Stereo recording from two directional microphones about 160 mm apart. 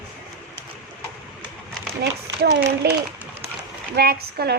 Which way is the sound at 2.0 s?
90° right.